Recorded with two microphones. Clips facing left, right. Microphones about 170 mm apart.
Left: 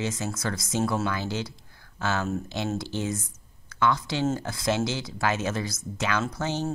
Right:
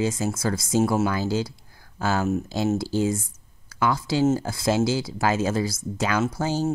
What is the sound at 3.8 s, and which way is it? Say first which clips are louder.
Speech: right 4 dB; 35° right (ahead or behind).